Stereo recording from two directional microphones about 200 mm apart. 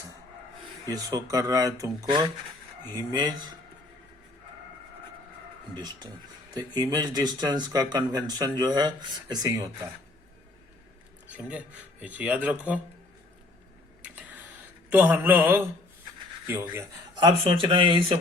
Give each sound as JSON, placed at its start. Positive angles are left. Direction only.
{"t": 0.9, "sound": "speech", "side_deg": -20}
{"t": 5.7, "sound": "speech", "side_deg": -20}
{"t": 11.3, "sound": "speech", "side_deg": -5}
{"t": 14.8, "sound": "speech", "side_deg": -10}
{"t": 17.2, "sound": "speech", "side_deg": -25}